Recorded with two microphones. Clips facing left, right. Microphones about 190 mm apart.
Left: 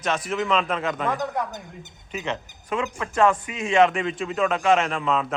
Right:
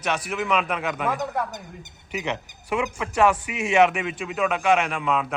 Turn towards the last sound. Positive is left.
turn(degrees=0)  # may be behind; listen again after turning